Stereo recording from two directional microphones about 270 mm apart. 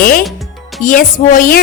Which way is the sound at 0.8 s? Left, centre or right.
Left.